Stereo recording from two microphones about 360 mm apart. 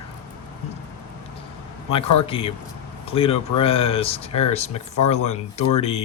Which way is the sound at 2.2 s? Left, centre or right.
Centre.